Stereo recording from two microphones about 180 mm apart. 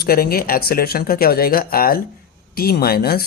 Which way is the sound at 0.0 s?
60° left (ahead or behind).